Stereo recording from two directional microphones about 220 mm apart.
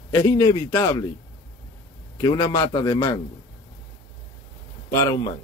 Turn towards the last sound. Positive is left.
turn(degrees=15)  # may be behind; listen again after turning